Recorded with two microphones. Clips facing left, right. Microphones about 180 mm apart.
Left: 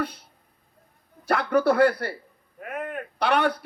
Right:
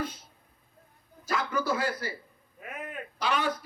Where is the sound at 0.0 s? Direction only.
65° left (ahead or behind).